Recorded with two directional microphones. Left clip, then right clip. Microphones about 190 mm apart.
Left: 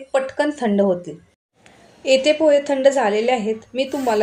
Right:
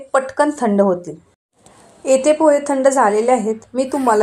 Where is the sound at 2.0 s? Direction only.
50° right (ahead or behind).